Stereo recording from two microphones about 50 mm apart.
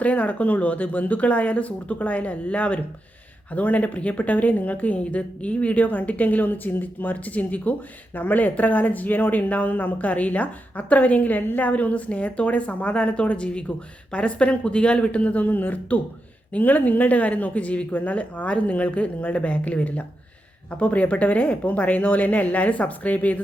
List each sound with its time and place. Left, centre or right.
0.0 s a woman's voice: left